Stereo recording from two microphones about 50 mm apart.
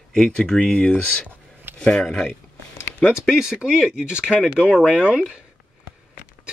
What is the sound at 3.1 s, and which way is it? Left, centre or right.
Speech, centre.